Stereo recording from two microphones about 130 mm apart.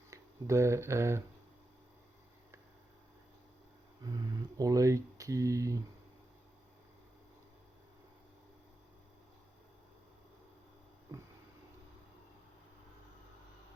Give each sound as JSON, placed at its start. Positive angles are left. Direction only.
{"t": 0.1, "sound": "speech", "side_deg": -20}
{"t": 4.0, "sound": "speech", "side_deg": -30}
{"t": 11.1, "sound": "a sound", "side_deg": -30}